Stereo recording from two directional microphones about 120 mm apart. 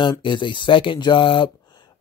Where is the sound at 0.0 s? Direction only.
40° left (ahead or behind).